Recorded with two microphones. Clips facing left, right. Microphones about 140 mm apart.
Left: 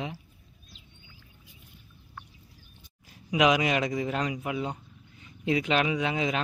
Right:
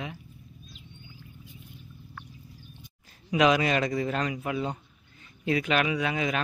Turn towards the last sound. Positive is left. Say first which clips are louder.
# even
turn(degrees=25)  # may be behind; listen again after turning